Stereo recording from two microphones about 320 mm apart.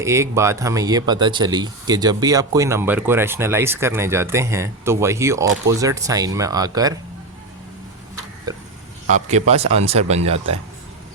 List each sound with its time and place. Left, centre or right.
0.0 s speech: centre
8.5 s a sound: centre
9.0 s a man's voice: right